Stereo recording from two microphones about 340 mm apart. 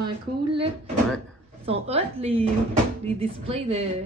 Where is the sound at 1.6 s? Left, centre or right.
Centre.